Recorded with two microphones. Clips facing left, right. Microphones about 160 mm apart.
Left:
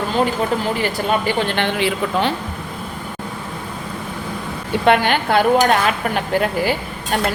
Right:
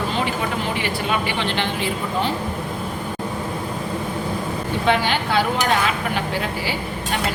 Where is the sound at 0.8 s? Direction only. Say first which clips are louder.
Left 3 dB; 45° left (ahead or behind); by 2.3 s 65° left (ahead or behind).